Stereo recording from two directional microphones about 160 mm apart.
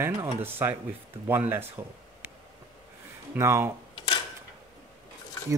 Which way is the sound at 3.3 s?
15° right (ahead or behind).